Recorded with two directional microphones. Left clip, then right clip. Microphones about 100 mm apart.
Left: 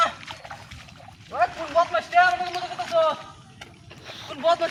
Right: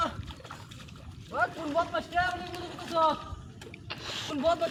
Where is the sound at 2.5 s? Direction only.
25° right (ahead or behind).